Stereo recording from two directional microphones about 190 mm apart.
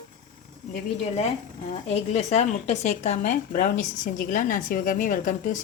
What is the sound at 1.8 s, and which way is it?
Speech, 35° left (ahead or behind).